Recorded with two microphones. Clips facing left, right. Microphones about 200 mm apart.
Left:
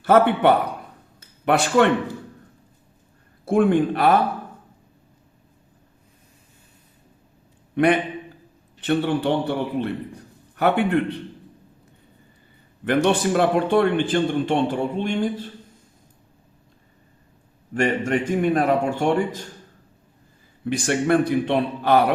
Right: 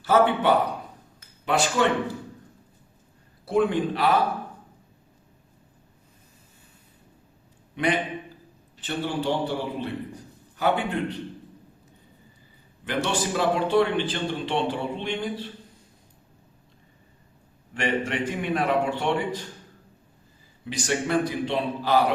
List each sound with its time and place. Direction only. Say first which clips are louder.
0.0 s a man's voice: left 4 dB; 60° left (ahead or behind)
3.4 s a man's voice: left 5 dB; 50° left (ahead or behind)
7.8 s a man's voice: left 7 dB; 55° left (ahead or behind)
13.1 s a man's voice: left 4 dB; 55° left (ahead or behind)
17.7 s a man's voice: left 5 dB; 45° left (ahead or behind)
20.7 s a man's voice: left 6 dB; 55° left (ahead or behind)